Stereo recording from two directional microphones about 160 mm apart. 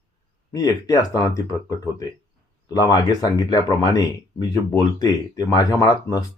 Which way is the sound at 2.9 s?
25° left (ahead or behind).